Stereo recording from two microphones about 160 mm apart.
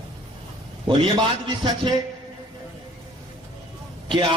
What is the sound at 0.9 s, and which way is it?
A man's voice, 30° right (ahead or behind).